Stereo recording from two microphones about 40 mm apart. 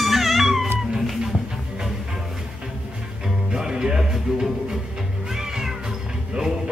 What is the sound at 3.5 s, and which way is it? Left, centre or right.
Music, centre.